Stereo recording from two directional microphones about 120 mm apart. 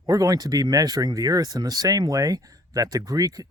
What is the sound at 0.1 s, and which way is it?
Speech, 30° right (ahead or behind).